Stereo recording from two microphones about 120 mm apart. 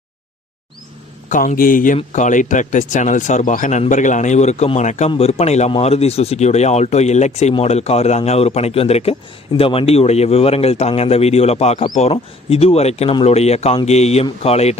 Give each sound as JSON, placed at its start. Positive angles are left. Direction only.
{"t": 1.3, "sound": "a man's voice", "side_deg": 90}